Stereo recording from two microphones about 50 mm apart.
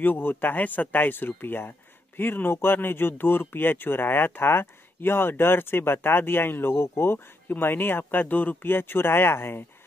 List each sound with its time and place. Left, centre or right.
0.0 s speech: left
8.6 s speech: left